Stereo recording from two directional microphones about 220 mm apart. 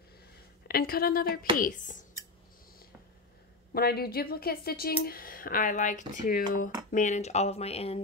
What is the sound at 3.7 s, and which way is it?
Speech, 45° left (ahead or behind).